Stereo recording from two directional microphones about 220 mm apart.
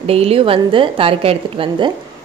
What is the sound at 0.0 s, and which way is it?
A woman's voice, 25° right (ahead or behind).